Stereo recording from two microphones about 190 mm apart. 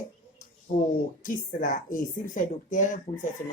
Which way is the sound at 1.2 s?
45° left (ahead or behind).